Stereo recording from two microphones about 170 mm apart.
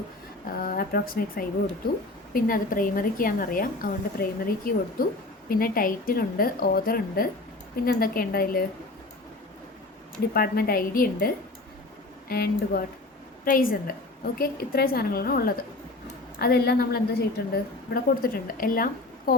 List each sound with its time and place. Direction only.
0.6 s a woman's voice: 60° left (ahead or behind)
10.3 s a woman's voice: 65° left (ahead or behind)
12.3 s a woman's voice: 60° left (ahead or behind)